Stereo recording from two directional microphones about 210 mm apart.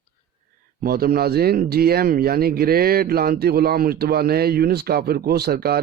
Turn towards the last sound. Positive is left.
turn(degrees=-50)  # may be behind; listen again after turning